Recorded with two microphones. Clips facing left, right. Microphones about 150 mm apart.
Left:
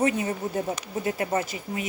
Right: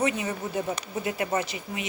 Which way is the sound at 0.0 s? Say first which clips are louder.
Left 3 dB; 45° left (ahead or behind).